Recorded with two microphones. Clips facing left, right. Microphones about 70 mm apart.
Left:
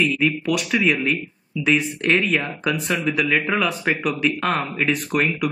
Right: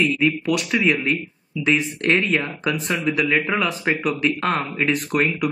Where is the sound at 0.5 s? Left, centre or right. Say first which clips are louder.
Even; centre.